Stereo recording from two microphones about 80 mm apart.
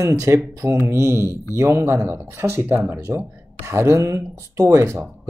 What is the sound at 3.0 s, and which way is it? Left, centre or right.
Speech, right.